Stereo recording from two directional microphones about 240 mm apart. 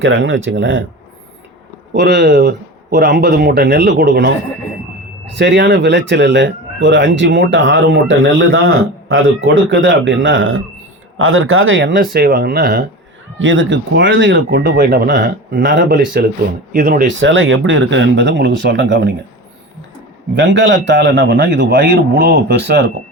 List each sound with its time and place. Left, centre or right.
0.0 s speech: right
1.9 s speech: right
5.4 s speech: right
12.1 s speech: right
13.4 s speech: right
17.2 s speech: right
20.3 s speech: right